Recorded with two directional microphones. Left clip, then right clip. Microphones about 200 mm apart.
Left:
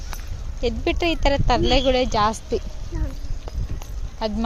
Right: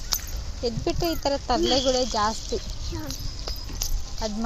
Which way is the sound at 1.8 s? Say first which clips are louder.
Left 4 dB; 50° left (ahead or behind).